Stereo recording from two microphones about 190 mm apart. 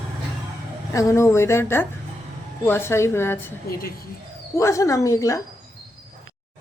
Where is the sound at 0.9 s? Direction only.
15° left (ahead or behind).